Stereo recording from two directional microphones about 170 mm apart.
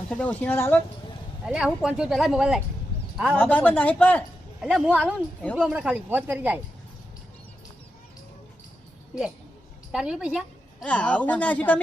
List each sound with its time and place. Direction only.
0.1 s speech: 10° left (ahead or behind)
1.5 s speech: 5° right (ahead or behind)
3.3 s speech: 10° left (ahead or behind)
4.6 s speech: 5° right (ahead or behind)
9.9 s speech: 5° right (ahead or behind)
10.8 s speech: 5° left (ahead or behind)